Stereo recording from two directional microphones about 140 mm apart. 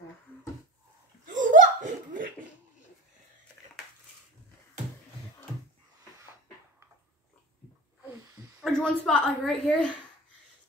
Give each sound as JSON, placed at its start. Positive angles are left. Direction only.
{"t": 1.2, "sound": "laughter", "side_deg": -65}
{"t": 8.5, "sound": "a woman's voice", "side_deg": 5}